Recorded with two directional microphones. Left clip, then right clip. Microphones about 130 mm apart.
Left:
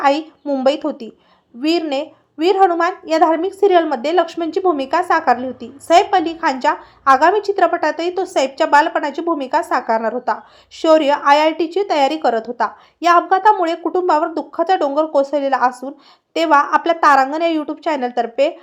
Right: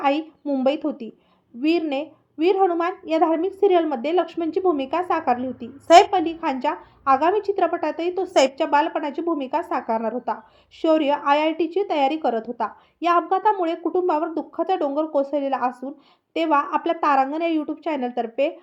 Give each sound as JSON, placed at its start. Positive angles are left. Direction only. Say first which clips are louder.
{"t": 0.0, "sound": "a woman's voice", "louder": "left 6 dB", "side_deg": -15}
{"t": 8.3, "sound": "a woman's voice", "louder": "left 4 dB", "side_deg": 0}